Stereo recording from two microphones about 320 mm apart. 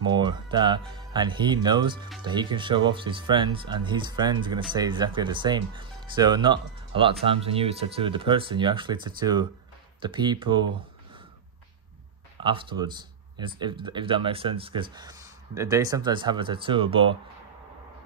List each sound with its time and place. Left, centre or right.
0.0 s speech: centre
12.4 s speech: centre